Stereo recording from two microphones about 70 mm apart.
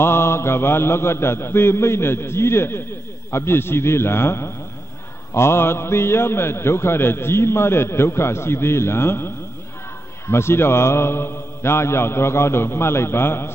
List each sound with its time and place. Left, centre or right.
0.0 s a man's voice: left